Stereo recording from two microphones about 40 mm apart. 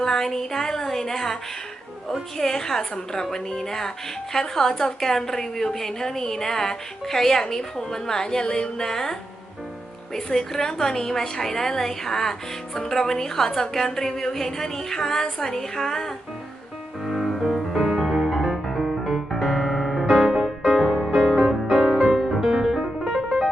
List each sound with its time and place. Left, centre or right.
0.0 s a woman's voice: centre
2.4 s a woman's voice: centre
10.2 s a woman's voice: centre
17.1 s music: centre; by 20.8 s right
20.8 s music: centre
21.1 s music: right
22.1 s music: centre